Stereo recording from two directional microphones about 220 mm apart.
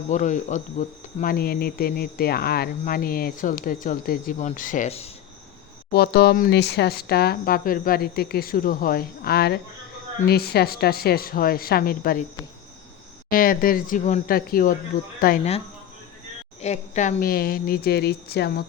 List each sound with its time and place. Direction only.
0.1 s speech: 35° left (ahead or behind)
5.9 s speech: 45° left (ahead or behind)
13.3 s speech: 40° left (ahead or behind)
16.6 s speech: 30° left (ahead or behind)